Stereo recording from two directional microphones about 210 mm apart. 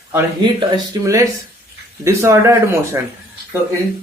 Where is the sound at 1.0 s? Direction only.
15° right (ahead or behind).